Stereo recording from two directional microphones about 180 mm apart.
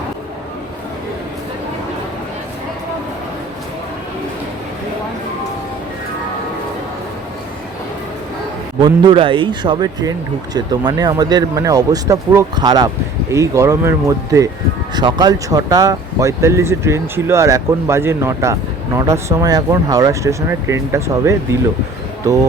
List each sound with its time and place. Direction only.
8.8 s speech: 25° right (ahead or behind)